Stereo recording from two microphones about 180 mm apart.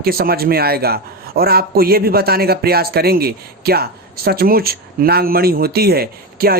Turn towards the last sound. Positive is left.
turn(degrees=-55)  # may be behind; listen again after turning